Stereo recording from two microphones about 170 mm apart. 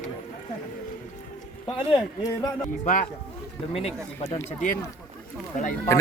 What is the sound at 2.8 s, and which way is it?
Speech, 50° left (ahead or behind).